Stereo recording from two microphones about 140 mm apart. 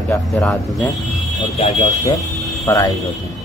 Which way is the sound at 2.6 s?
25° left (ahead or behind).